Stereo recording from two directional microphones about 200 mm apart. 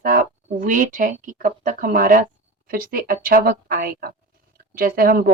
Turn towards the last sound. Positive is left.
turn(degrees=-45)  # may be behind; listen again after turning